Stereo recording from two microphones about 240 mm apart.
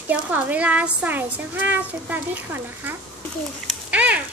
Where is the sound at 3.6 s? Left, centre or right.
Centre.